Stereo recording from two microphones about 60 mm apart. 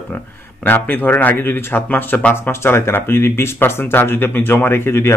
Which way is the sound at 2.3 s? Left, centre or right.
Left.